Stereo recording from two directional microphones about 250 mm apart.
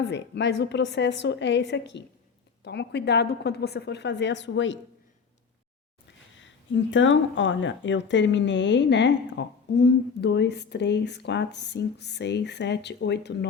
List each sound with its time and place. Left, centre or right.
0.0 s speech: left
6.9 s speech: left